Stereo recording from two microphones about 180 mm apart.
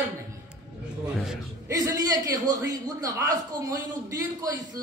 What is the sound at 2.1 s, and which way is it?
A man's voice, 20° right (ahead or behind).